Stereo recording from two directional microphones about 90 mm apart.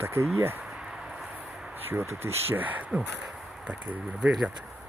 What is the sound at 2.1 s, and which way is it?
Speech, 25° right (ahead or behind).